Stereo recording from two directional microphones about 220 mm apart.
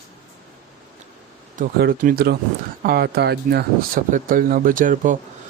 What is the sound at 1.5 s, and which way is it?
Speech, 40° right (ahead or behind).